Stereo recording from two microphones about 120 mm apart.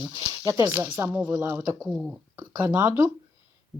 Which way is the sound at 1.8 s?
Centre (ahead or behind).